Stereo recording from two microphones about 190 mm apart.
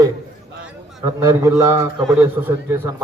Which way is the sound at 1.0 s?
15° right (ahead or behind).